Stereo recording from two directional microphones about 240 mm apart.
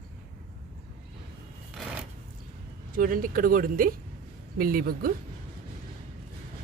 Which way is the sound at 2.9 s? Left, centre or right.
Right.